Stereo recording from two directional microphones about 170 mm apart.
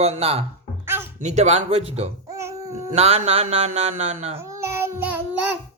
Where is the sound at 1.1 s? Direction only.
45° right (ahead or behind).